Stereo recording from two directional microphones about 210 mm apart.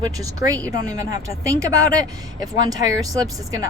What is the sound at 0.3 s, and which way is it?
A woman's voice, 15° right (ahead or behind).